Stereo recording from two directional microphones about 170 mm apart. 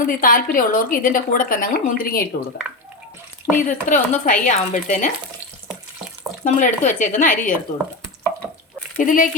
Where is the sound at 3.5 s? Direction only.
50° left (ahead or behind).